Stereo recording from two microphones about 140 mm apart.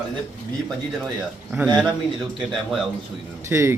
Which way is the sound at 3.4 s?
20° right (ahead or behind).